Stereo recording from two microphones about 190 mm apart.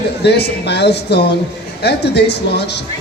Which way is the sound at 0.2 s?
60° left (ahead or behind).